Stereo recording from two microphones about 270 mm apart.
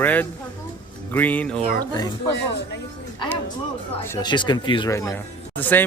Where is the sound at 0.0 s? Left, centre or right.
Centre.